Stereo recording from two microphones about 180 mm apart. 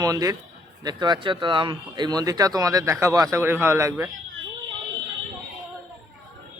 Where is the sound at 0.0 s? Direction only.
20° right (ahead or behind).